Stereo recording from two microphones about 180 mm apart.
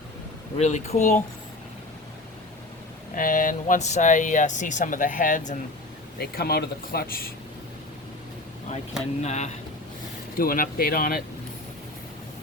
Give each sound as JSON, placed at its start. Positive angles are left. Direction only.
{"t": 0.6, "sound": "speech", "side_deg": 40}
{"t": 3.2, "sound": "speech", "side_deg": 50}
{"t": 6.1, "sound": "speech", "side_deg": 60}
{"t": 9.2, "sound": "speech", "side_deg": 40}
{"t": 10.3, "sound": "speech", "side_deg": 55}